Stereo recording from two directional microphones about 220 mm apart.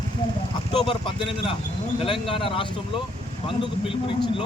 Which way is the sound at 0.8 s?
25° left (ahead or behind).